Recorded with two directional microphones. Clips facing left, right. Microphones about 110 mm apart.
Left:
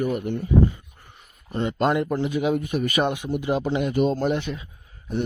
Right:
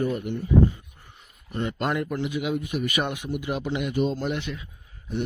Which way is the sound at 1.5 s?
30° left (ahead or behind).